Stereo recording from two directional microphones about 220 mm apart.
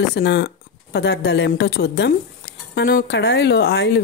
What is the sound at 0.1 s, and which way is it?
Speech, 50° left (ahead or behind).